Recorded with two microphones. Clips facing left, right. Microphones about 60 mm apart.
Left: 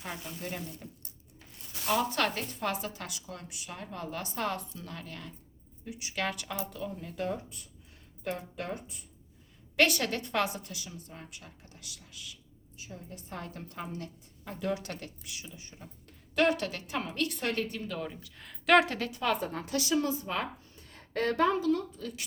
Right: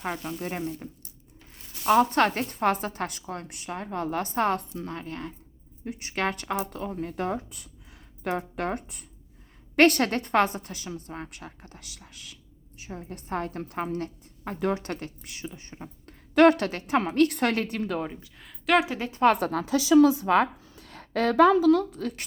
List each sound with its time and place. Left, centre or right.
0.0 s a woman's voice: right
1.9 s a woman's voice: right
5.8 s a woman's voice: right
8.2 s speech: right
9.7 s a woman's voice: right
18.0 s speech: right
18.3 s speech: centre
19.2 s a woman's voice: right
20.1 s a woman's voice: right